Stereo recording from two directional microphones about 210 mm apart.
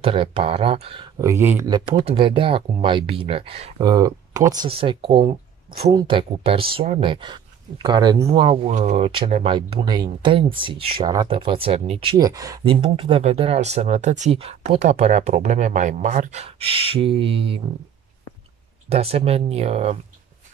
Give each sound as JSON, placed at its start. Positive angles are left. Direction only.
{"t": 0.0, "sound": "speech", "side_deg": -25}
{"t": 1.2, "sound": "speech", "side_deg": -10}
{"t": 18.9, "sound": "speech", "side_deg": -30}